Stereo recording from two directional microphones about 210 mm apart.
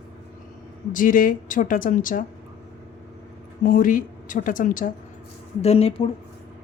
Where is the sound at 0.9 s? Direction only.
40° left (ahead or behind).